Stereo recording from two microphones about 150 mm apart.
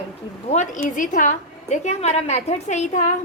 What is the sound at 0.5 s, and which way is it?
A woman's voice, 55° left (ahead or behind).